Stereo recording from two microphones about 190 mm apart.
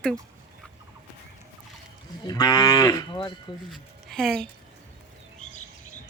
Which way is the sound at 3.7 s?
Centre (ahead or behind).